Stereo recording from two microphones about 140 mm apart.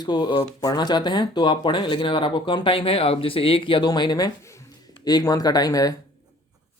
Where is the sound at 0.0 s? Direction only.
30° left (ahead or behind).